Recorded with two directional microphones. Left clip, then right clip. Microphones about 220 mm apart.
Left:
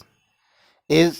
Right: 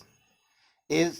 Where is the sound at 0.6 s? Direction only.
40° left (ahead or behind).